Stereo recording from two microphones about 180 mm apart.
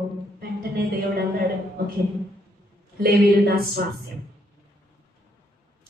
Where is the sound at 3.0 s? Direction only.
60° right (ahead or behind).